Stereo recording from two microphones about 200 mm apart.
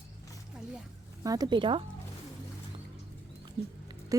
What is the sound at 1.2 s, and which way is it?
Speech, 20° right (ahead or behind).